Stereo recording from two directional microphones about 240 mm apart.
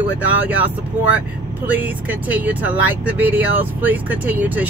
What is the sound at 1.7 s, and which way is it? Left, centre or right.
Speech, centre.